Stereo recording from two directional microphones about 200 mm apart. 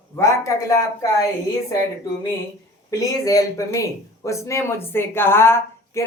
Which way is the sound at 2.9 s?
15° left (ahead or behind).